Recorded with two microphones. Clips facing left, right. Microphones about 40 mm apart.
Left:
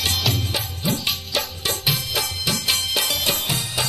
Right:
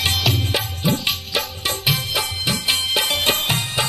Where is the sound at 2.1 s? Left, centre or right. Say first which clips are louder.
Right 2 dB; right.